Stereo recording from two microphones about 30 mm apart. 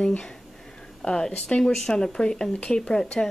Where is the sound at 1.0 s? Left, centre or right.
Left.